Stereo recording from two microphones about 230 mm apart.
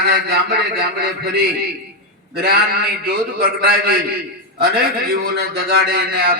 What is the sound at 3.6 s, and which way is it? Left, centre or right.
Speech, right.